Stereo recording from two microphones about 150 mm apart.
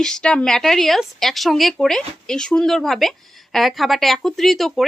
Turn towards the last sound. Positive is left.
turn(degrees=0)  # may be behind; listen again after turning